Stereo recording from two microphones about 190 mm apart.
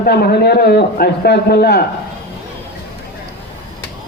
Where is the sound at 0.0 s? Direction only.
50° left (ahead or behind).